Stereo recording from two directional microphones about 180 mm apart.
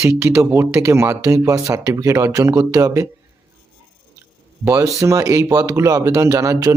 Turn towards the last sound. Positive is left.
turn(degrees=-15)  # may be behind; listen again after turning